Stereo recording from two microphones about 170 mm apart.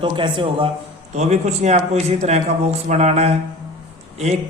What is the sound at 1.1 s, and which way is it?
A man's voice, 40° right (ahead or behind).